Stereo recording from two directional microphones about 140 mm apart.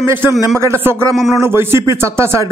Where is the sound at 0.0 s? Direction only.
15° right (ahead or behind).